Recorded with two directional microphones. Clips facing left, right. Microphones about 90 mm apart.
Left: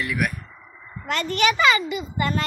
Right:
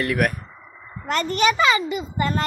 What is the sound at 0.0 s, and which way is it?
Speech, 60° right (ahead or behind).